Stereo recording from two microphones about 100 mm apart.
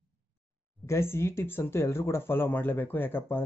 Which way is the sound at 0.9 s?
25° left (ahead or behind).